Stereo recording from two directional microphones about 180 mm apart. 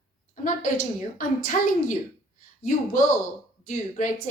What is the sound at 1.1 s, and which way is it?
Speech, 45° left (ahead or behind).